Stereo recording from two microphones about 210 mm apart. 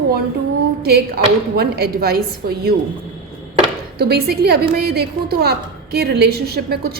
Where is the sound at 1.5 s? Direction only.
50° right (ahead or behind).